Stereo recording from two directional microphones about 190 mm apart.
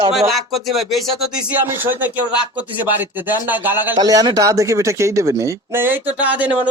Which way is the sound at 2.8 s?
10° right (ahead or behind).